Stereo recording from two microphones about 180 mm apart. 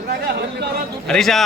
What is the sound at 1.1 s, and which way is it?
Speech, centre (ahead or behind).